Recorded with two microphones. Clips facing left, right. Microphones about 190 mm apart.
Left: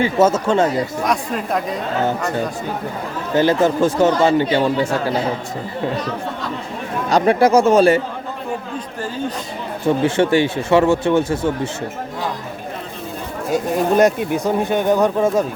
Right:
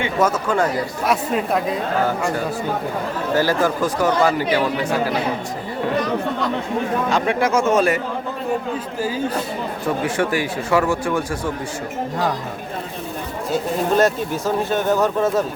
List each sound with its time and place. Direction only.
0.0 s a man's voice: 25° left (ahead or behind)
1.0 s speech: 5° right (ahead or behind)
3.3 s a man's voice: 20° left (ahead or behind)
7.1 s speech: 35° left (ahead or behind)
9.0 s speech: 5° right (ahead or behind)
9.8 s a man's voice: 25° left (ahead or behind)
13.5 s speech: 15° left (ahead or behind)